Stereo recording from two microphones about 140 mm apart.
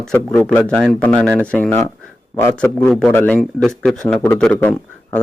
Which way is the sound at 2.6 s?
5° left (ahead or behind).